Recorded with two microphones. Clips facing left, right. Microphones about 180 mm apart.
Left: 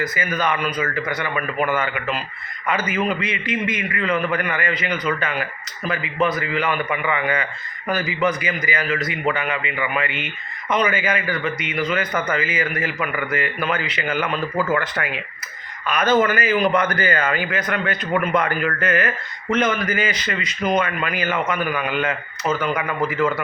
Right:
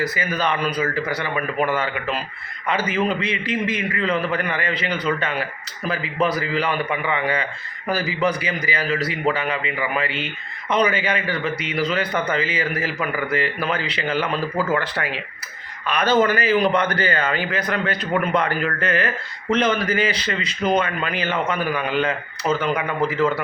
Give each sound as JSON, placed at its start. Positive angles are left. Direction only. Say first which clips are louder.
{"t": 0.0, "sound": "a man's voice", "louder": "even", "side_deg": -35}